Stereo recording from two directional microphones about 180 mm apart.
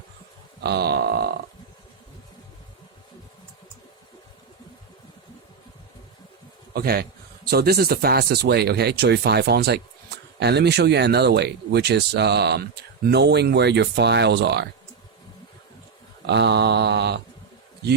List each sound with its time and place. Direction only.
0.6 s speech: 65° right (ahead or behind)
6.7 s speech: 60° right (ahead or behind)
16.2 s a sound: 70° right (ahead or behind)